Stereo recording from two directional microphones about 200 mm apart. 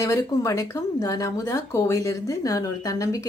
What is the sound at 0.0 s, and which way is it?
A woman's voice, 15° left (ahead or behind).